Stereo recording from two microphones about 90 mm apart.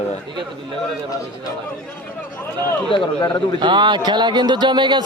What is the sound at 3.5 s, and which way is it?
Speech, 60° right (ahead or behind).